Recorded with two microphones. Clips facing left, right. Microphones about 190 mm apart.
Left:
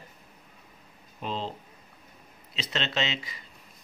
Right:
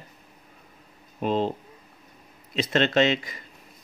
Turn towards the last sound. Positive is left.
turn(degrees=-50)  # may be behind; listen again after turning